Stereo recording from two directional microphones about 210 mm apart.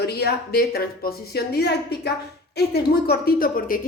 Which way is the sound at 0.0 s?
50° left (ahead or behind).